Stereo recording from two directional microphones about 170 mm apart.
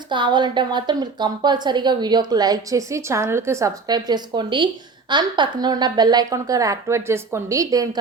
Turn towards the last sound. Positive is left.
turn(degrees=-20)  # may be behind; listen again after turning